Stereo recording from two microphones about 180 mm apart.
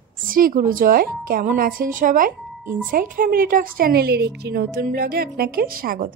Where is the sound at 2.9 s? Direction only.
50° right (ahead or behind).